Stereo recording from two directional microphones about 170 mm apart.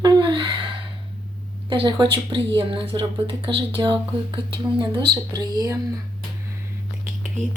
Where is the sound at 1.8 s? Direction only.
25° right (ahead or behind).